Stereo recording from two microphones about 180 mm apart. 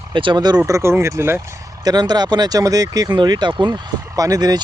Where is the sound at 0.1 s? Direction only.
25° right (ahead or behind).